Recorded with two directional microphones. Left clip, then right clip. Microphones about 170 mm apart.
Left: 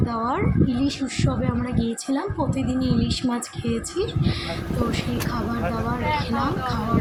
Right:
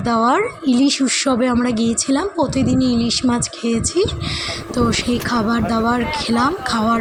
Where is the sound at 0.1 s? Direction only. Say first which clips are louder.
Right 13 dB; 45° right (ahead or behind).